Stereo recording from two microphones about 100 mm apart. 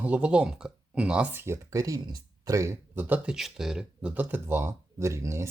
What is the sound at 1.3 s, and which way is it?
Speech, 25° right (ahead or behind).